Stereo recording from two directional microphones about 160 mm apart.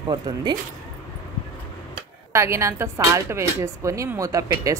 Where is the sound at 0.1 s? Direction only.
30° right (ahead or behind).